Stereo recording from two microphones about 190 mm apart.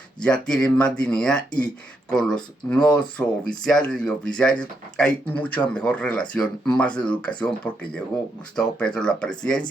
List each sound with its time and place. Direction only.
0.2 s speech: 5° left (ahead or behind)